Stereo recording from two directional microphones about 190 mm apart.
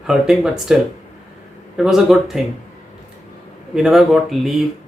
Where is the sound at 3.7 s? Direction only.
Centre (ahead or behind).